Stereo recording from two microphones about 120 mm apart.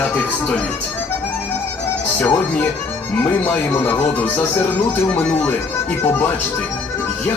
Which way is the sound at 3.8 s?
15° left (ahead or behind).